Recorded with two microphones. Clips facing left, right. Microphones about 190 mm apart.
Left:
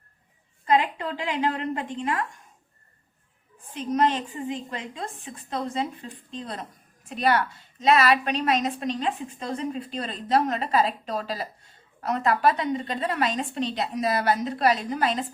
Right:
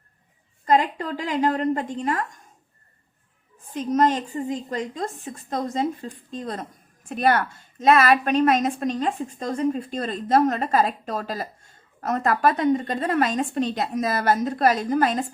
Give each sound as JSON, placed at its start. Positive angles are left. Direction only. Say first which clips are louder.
{"t": 0.6, "sound": "a woman's voice", "louder": "right 2 dB", "side_deg": -40}
{"t": 3.7, "sound": "a woman's voice", "louder": "right 3 dB", "side_deg": -45}